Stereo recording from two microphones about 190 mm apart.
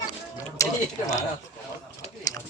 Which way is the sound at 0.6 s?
15° left (ahead or behind).